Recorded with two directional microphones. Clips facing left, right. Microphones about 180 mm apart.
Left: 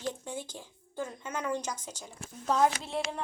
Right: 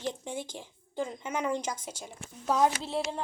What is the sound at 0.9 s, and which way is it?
Speech, 15° right (ahead or behind).